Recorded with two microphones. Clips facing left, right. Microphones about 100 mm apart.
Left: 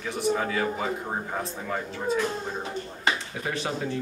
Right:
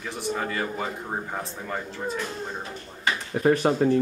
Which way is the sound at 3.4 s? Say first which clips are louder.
Right 12 dB; 45° right (ahead or behind).